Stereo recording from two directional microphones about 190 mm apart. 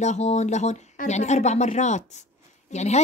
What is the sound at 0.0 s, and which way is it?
Speech, 35° left (ahead or behind).